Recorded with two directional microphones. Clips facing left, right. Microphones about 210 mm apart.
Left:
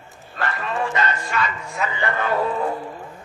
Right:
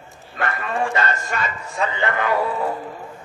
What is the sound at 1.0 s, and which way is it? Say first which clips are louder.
Speech: even; 45° right (ahead or behind).